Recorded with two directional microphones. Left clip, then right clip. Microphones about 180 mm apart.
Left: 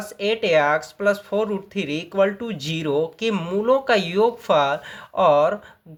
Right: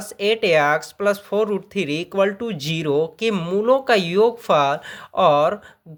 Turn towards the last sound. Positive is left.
turn(degrees=-25)  # may be behind; listen again after turning